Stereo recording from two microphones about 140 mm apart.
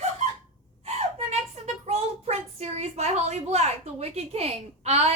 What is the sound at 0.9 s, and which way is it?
A child's voice, 50° right (ahead or behind).